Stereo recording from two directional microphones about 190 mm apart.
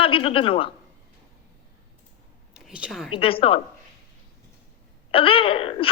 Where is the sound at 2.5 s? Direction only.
5° right (ahead or behind).